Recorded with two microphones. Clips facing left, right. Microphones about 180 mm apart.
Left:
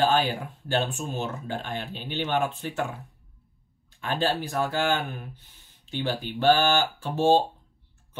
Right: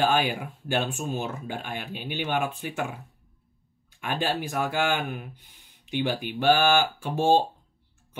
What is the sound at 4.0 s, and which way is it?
Speech, 15° right (ahead or behind).